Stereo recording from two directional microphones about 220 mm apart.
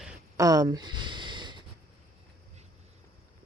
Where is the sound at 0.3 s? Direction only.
15° right (ahead or behind).